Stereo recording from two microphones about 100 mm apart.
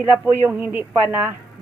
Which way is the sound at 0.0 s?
20° right (ahead or behind).